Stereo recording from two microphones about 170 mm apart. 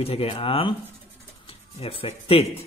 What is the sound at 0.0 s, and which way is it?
Speech, 35° left (ahead or behind).